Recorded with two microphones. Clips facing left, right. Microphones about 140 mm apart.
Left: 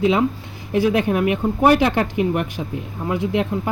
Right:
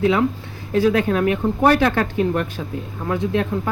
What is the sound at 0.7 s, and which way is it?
Speech, 15° left (ahead or behind).